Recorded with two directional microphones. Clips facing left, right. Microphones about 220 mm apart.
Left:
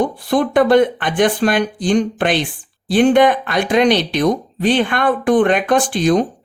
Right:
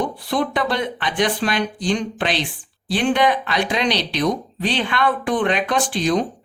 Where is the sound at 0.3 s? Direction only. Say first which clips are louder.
Left 10 dB; 50° left (ahead or behind).